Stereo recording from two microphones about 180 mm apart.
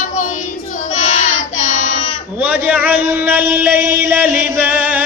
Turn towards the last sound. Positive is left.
turn(degrees=-10)  # may be behind; listen again after turning